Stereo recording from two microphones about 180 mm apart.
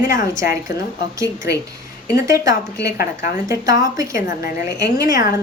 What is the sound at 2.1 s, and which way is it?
Speech, 20° right (ahead or behind).